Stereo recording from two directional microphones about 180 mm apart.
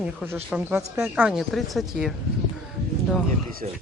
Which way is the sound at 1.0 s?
5° right (ahead or behind).